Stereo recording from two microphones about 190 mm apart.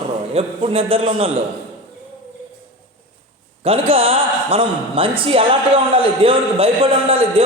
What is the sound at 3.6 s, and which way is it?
A man's voice, 30° right (ahead or behind).